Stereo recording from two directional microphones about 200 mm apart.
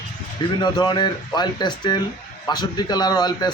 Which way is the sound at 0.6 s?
20° left (ahead or behind).